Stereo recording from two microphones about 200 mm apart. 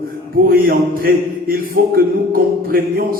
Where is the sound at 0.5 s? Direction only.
45° right (ahead or behind).